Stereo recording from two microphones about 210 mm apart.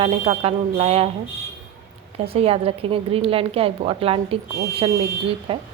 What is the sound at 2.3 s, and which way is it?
Speech, 30° right (ahead or behind).